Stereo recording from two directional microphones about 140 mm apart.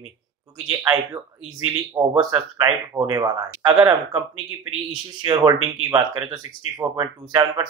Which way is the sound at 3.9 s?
15° right (ahead or behind).